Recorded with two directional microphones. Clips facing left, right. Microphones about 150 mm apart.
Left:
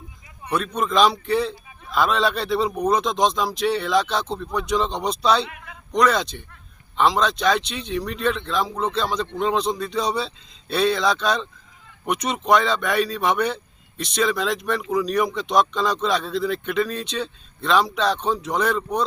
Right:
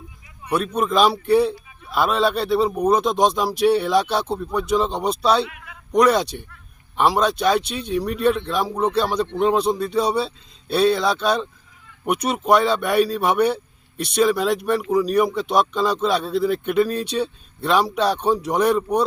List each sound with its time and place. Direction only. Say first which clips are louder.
0.5 s a man's voice: right 2 dB; 5° right (ahead or behind)
5.5 s a sound: left 1 dB; 30° left (ahead or behind)
5.9 s a man's voice: right 3 dB; 10° right (ahead or behind)